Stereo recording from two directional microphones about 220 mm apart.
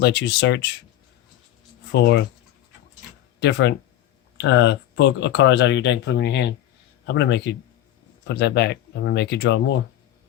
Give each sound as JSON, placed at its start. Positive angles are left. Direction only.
{"t": 0.0, "sound": "speech", "side_deg": 50}
{"t": 1.9, "sound": "speech", "side_deg": 50}
{"t": 3.4, "sound": "speech", "side_deg": 50}